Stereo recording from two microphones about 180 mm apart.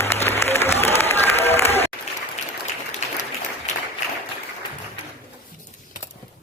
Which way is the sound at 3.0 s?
35° left (ahead or behind).